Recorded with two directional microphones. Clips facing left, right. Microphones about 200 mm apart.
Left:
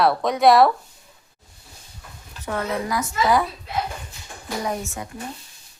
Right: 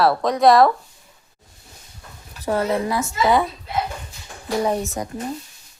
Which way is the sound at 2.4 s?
35° right (ahead or behind).